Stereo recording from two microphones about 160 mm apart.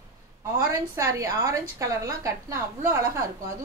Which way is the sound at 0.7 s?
20° right (ahead or behind).